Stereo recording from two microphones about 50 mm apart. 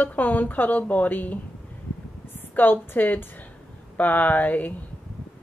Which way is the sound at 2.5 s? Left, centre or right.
Left.